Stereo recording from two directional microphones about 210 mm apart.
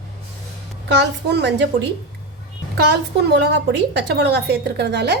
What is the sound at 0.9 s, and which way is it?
Speech, 55° right (ahead or behind).